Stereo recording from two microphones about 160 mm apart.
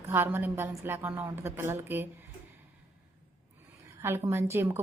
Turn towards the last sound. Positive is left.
turn(degrees=-15)  # may be behind; listen again after turning